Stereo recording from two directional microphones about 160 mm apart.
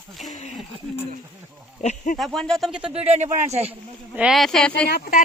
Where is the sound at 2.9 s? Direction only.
45° right (ahead or behind).